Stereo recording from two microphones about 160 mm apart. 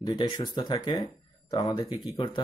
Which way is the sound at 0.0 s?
25° left (ahead or behind).